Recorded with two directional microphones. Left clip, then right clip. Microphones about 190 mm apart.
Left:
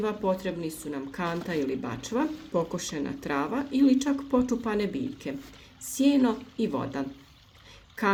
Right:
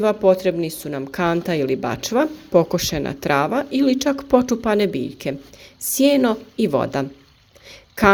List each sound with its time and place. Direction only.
0.0 s a woman's voice: 40° right (ahead or behind)